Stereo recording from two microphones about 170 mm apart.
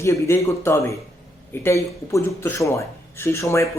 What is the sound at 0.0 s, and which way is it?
Speech, 15° left (ahead or behind).